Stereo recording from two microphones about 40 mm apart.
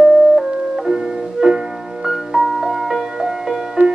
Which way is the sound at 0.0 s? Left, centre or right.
Centre.